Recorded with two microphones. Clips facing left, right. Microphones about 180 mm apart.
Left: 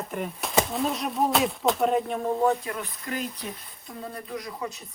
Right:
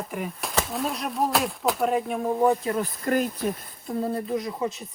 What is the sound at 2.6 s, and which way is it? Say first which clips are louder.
Speech: right 8 dB; 40° right (ahead or behind).